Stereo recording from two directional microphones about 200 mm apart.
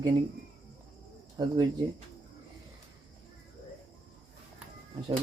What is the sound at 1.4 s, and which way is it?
Speech, 20° right (ahead or behind).